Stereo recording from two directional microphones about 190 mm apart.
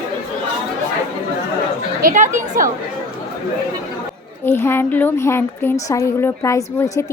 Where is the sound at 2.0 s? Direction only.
45° right (ahead or behind).